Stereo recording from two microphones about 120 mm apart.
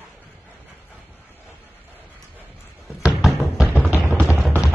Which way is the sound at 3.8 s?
15° right (ahead or behind).